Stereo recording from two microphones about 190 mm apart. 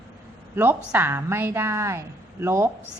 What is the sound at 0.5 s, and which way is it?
A woman's voice, 10° right (ahead or behind).